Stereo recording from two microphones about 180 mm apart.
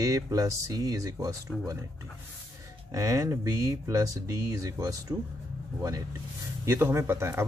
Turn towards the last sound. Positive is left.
turn(degrees=-15)  # may be behind; listen again after turning